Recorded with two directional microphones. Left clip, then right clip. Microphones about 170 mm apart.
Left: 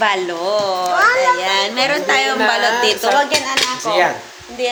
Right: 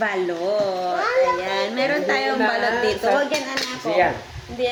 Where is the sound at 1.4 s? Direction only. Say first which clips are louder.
Left 6 dB; 20° right (ahead or behind).